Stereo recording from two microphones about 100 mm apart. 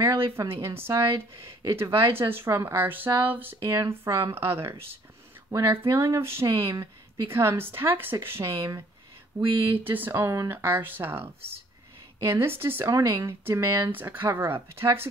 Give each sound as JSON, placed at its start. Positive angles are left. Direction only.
{"t": 0.0, "sound": "a sound", "side_deg": -25}
{"t": 0.4, "sound": "speech", "side_deg": -25}
{"t": 3.5, "sound": "speech", "side_deg": -30}
{"t": 9.3, "sound": "a sound", "side_deg": -50}
{"t": 9.8, "sound": "speech", "side_deg": -20}
{"t": 12.3, "sound": "speech", "side_deg": -25}